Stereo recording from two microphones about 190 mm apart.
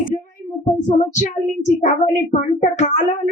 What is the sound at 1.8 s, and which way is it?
Speech, 40° left (ahead or behind).